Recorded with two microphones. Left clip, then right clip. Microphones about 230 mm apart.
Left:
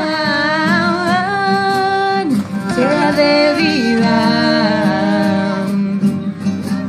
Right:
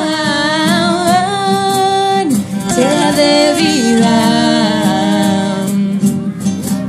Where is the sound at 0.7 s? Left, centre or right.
Right.